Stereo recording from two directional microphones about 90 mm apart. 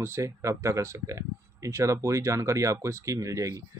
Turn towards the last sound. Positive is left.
turn(degrees=-35)  # may be behind; listen again after turning